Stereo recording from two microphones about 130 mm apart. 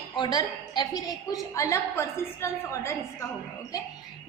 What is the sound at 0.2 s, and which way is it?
A woman's voice, 35° left (ahead or behind).